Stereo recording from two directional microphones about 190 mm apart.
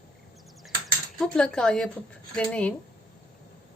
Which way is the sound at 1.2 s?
5° left (ahead or behind).